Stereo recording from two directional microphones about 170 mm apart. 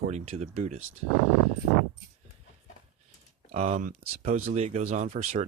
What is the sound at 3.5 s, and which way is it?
Speech, 40° right (ahead or behind).